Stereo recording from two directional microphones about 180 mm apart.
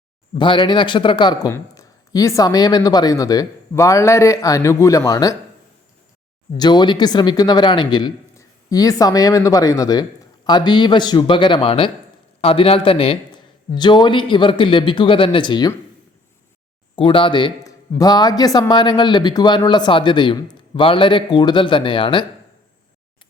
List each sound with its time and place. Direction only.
0.3 s speech: 25° left (ahead or behind)
6.6 s a man's voice: 25° left (ahead or behind)
16.9 s speech: 30° left (ahead or behind)